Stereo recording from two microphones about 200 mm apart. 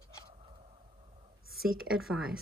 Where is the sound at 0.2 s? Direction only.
30° right (ahead or behind).